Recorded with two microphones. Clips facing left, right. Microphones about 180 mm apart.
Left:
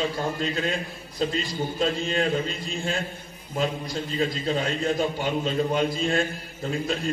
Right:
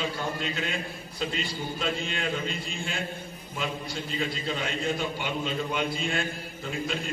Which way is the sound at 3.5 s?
40° left (ahead or behind).